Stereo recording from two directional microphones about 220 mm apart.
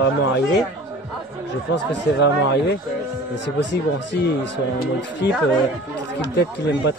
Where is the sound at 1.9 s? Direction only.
50° left (ahead or behind).